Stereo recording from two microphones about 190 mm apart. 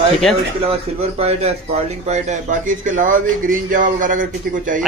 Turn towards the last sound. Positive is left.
turn(degrees=-45)  # may be behind; listen again after turning